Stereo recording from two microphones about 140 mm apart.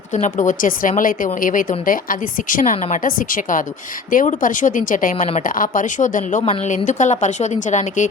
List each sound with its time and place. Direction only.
0.1 s a woman's voice: 60° left (ahead or behind)